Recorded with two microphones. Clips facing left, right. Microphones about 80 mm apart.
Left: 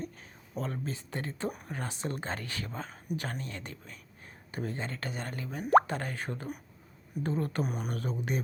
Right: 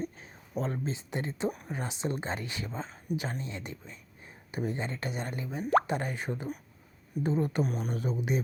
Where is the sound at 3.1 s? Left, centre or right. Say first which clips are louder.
Right 3 dB; centre.